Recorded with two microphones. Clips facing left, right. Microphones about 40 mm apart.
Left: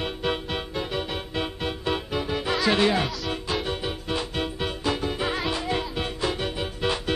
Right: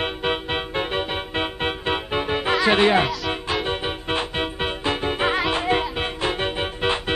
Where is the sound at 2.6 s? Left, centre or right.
Right.